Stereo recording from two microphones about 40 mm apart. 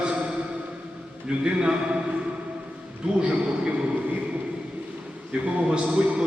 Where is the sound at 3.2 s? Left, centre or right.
Right.